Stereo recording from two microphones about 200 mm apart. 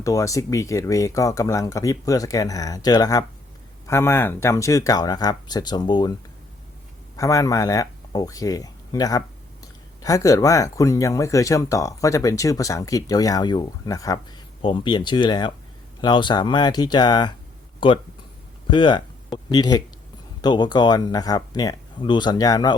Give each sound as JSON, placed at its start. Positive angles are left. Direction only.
{"t": 0.0, "sound": "speech", "side_deg": 15}
{"t": 7.2, "sound": "speech", "side_deg": 15}